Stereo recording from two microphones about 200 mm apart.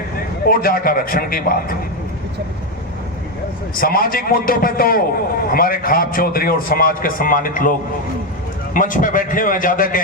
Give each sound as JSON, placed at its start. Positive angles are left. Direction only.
{"t": 0.4, "sound": "a man's voice", "side_deg": 50}
{"t": 3.8, "sound": "a man's voice", "side_deg": 45}